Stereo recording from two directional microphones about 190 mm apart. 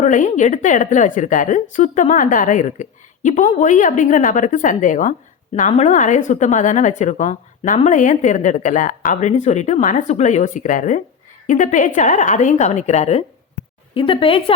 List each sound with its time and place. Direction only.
0.0 s a woman's voice: 40° left (ahead or behind)